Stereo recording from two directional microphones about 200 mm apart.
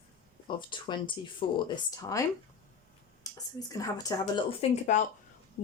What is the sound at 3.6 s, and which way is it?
Speech, 20° left (ahead or behind).